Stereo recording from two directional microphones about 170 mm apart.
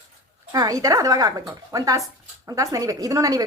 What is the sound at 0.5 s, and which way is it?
Speech, 20° right (ahead or behind).